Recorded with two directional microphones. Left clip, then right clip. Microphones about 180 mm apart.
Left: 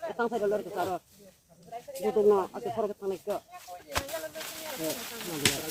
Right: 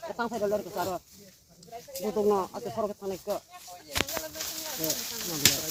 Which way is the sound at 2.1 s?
40° right (ahead or behind).